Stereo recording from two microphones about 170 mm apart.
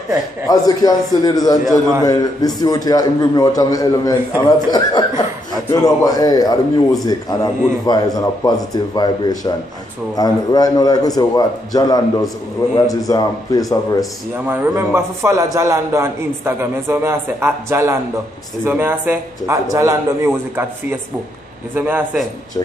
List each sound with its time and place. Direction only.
0.5 s a man's voice: 20° left (ahead or behind)
14.5 s a man's voice: 10° right (ahead or behind)
21.7 s a man's voice: 10° right (ahead or behind)